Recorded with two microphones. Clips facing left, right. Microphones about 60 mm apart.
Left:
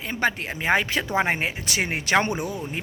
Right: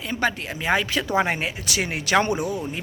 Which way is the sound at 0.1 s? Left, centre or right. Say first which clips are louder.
Even; left.